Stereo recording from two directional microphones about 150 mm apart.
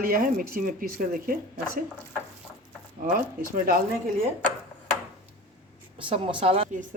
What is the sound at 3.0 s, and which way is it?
Speech, 65° right (ahead or behind).